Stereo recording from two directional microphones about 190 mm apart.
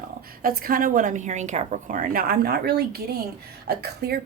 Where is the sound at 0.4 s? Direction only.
50° right (ahead or behind).